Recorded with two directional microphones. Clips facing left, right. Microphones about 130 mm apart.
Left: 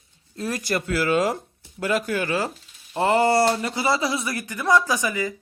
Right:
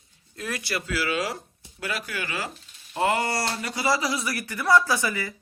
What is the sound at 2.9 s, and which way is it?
Speech, 30° left (ahead or behind).